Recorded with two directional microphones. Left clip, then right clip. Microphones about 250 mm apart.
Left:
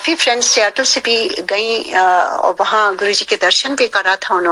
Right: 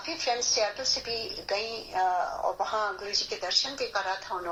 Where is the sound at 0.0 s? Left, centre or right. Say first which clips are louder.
Left 15 dB; left.